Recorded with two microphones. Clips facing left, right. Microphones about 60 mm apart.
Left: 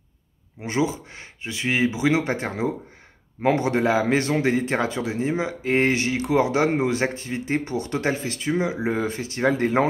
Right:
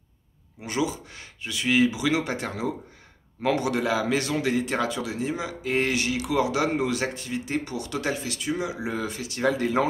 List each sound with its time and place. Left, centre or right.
0.6 s a man's voice: left